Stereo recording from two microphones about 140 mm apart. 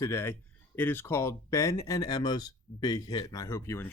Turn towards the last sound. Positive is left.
turn(degrees=20)  # may be behind; listen again after turning